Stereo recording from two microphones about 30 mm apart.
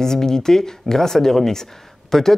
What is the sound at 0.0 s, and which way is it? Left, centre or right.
Speech, centre.